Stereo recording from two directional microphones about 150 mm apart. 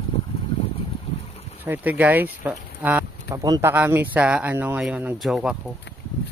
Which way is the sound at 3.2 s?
25° right (ahead or behind).